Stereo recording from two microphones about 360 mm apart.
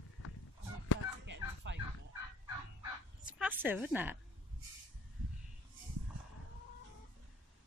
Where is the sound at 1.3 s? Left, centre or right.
Right.